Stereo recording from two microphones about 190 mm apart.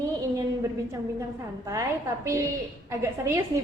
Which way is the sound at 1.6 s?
15° right (ahead or behind).